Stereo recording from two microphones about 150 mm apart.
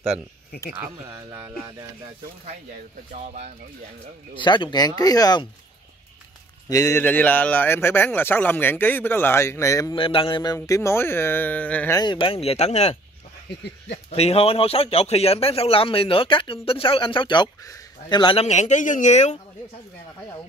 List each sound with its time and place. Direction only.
4.4 s speech: 30° left (ahead or behind)
6.7 s speech: 20° left (ahead or behind)
9.9 s speech: 35° left (ahead or behind); by 12.0 s 10° left (ahead or behind)
12.0 s a man's voice: 35° left (ahead or behind)
14.1 s a man's voice: 40° left (ahead or behind)
18.4 s speech: 50° left (ahead or behind)